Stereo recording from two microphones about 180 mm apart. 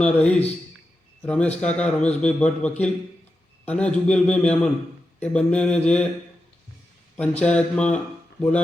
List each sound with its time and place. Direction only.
0.0 s a man's voice: 5° left (ahead or behind)
7.2 s a man's voice: 5° left (ahead or behind)